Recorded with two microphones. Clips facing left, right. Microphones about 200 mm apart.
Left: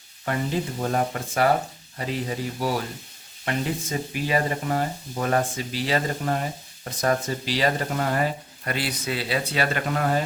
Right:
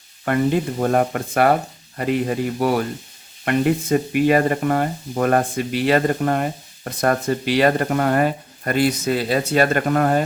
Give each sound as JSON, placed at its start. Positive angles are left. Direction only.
{"t": 0.3, "sound": "speech", "side_deg": -55}